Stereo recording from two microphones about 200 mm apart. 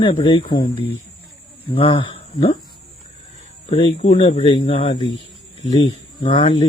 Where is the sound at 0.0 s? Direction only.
25° left (ahead or behind).